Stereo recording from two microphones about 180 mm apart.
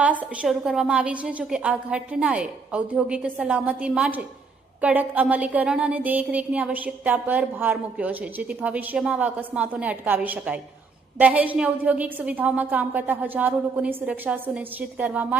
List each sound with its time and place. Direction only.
0.0 s a woman's voice: 10° right (ahead or behind)